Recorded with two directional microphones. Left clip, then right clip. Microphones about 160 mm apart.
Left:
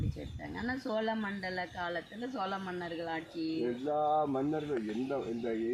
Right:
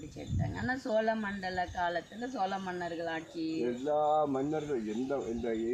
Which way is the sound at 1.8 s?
35° right (ahead or behind).